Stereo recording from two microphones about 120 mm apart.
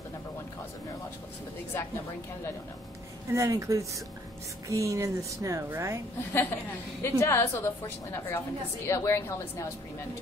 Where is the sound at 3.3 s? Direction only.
25° right (ahead or behind).